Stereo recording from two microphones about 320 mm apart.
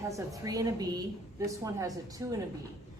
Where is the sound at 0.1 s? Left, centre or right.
Centre.